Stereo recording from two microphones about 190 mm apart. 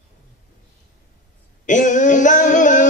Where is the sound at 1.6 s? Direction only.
40° left (ahead or behind).